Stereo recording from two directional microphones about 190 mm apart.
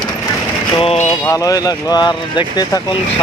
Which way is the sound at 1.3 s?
20° left (ahead or behind).